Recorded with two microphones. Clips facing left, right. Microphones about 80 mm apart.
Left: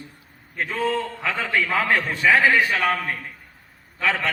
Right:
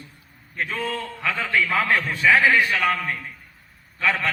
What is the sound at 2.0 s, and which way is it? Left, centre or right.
A man's voice, centre.